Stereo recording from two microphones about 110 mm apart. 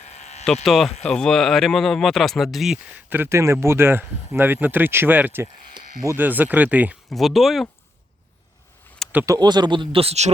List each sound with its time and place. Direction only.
0.0 s a sound: 85° left
0.4 s speech: centre (ahead or behind)
3.1 s speech: 20° right (ahead or behind)
7.1 s speech: centre (ahead or behind)
9.2 s speech: 35° right (ahead or behind); by 10.3 s 75° right (ahead or behind)